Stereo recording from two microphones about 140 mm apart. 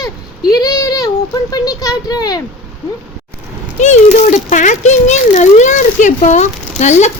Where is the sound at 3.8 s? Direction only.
50° left (ahead or behind).